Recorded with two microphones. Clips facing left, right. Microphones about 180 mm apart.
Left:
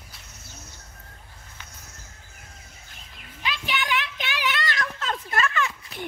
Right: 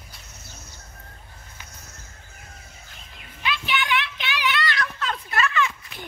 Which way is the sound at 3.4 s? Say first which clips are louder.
Right 3 dB; 40° left (ahead or behind).